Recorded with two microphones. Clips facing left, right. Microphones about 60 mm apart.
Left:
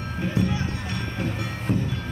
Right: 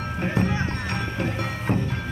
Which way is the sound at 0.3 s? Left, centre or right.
Right.